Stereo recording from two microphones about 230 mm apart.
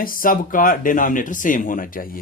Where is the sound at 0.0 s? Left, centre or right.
Left.